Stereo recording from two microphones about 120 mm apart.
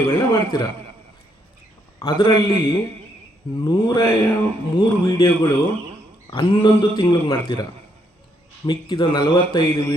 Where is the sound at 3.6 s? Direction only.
35° left (ahead or behind).